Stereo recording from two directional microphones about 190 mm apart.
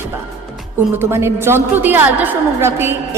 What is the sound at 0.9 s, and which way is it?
A woman's voice, 15° right (ahead or behind).